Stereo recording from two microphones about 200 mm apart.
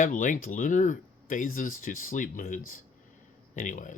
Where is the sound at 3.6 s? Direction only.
40° left (ahead or behind).